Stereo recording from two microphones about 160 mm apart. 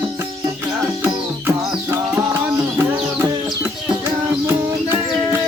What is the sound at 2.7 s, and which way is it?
Music, 10° right (ahead or behind).